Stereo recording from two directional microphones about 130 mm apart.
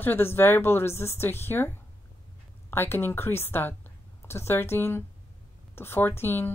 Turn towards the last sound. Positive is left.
turn(degrees=15)  # may be behind; listen again after turning